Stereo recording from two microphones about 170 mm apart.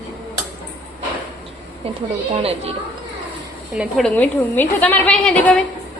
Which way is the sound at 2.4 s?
35° right (ahead or behind).